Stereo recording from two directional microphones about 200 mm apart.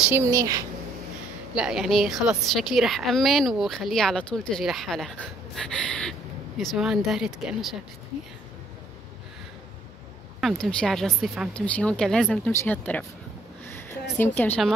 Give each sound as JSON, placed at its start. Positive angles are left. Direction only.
{"t": 0.0, "sound": "a woman's voice", "side_deg": -10}
{"t": 1.5, "sound": "a woman's voice", "side_deg": 0}
{"t": 5.6, "sound": "a sound", "side_deg": 5}
{"t": 6.6, "sound": "a woman's voice", "side_deg": 0}
{"t": 10.4, "sound": "a woman's voice", "side_deg": 5}
{"t": 14.1, "sound": "speech", "side_deg": 10}